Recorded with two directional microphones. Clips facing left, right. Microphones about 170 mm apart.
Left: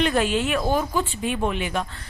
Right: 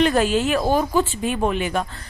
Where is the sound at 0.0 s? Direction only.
40° right (ahead or behind).